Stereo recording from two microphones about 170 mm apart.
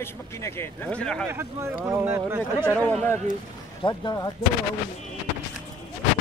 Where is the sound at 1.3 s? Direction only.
15° right (ahead or behind).